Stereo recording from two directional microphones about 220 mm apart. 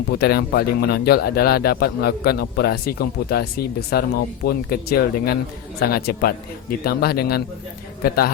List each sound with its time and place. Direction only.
0.2 s speech: 45° left (ahead or behind)